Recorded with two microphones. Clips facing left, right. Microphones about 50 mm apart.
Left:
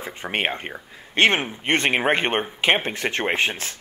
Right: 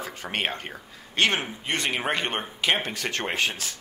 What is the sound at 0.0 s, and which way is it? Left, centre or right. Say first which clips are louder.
Speech: left 4 dB; left.